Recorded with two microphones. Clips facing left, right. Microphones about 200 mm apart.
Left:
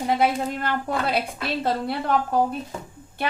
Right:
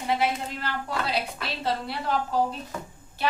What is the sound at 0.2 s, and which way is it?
A woman's voice, 50° left (ahead or behind).